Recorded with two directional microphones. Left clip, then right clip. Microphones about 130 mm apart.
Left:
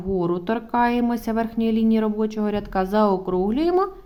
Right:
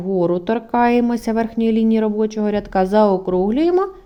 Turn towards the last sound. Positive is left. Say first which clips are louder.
# right 4 dB
turn(degrees=-30)  # may be behind; listen again after turning